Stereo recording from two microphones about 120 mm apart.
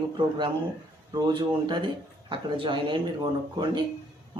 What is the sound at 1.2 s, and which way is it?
Speech, 40° right (ahead or behind).